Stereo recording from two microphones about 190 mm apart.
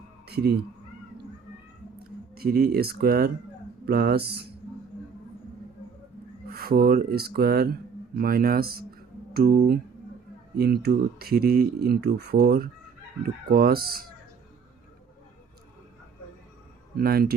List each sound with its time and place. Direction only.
0.3 s speech: 55° right (ahead or behind)
2.0 s speech: 55° right (ahead or behind)
6.5 s speech: 50° right (ahead or behind)
17.0 s speech: 55° right (ahead or behind)